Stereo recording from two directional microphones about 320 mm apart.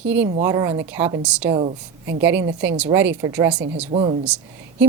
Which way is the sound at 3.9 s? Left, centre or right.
Right.